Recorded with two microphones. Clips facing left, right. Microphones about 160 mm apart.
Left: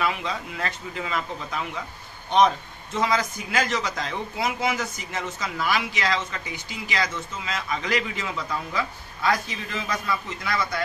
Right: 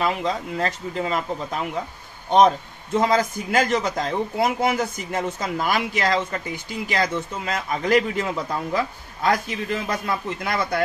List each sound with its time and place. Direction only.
0.0 s speech: 40° right (ahead or behind)